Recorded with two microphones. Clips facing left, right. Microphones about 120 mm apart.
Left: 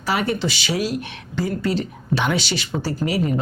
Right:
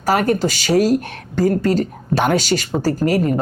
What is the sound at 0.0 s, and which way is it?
Speech, 45° right (ahead or behind).